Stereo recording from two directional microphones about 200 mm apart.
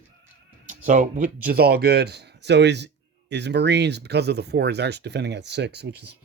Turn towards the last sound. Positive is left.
turn(degrees=-55)  # may be behind; listen again after turning